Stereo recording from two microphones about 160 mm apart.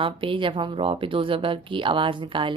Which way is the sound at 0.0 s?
30° right (ahead or behind).